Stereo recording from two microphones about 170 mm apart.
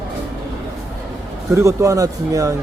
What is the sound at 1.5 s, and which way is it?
Speech, 20° right (ahead or behind).